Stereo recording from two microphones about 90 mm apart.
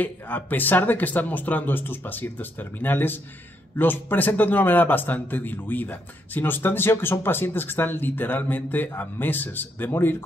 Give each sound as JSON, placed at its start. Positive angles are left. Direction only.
{"t": 0.0, "sound": "a man's voice", "side_deg": 20}